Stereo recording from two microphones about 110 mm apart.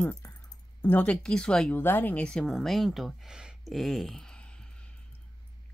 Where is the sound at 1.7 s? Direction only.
20° left (ahead or behind).